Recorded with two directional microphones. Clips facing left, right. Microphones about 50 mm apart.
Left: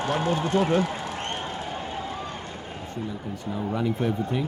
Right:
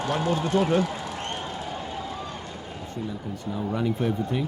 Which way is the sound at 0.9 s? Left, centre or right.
Left.